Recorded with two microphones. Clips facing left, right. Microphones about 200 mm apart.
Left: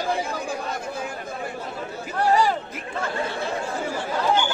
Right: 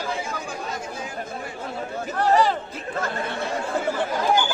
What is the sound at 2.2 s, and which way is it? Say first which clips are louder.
Speech: right 1 dB; 10° left (ahead or behind).